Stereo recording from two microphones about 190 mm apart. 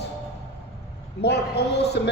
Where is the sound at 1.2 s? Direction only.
60° left (ahead or behind).